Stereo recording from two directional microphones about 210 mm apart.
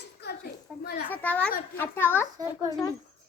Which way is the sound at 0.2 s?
50° left (ahead or behind).